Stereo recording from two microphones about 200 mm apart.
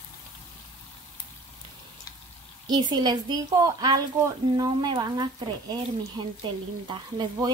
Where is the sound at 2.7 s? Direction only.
20° right (ahead or behind).